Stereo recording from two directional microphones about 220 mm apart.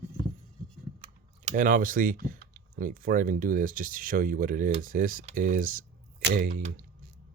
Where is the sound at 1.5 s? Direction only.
35° right (ahead or behind).